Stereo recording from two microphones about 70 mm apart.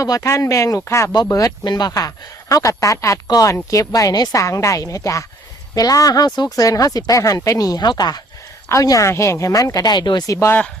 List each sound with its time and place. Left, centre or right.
0.0 s speech: left
1.3 s a woman's voice: left
1.6 s speech: left
1.9 s speech: left
3.2 s a woman's voice: left
3.5 s speech: left
4.1 s speech: left
4.4 s speech: left
5.7 s speech: left
6.7 s a woman's voice: left
8.7 s speech: left
9.5 s a woman's voice: left
9.8 s speech: left
10.2 s speech: left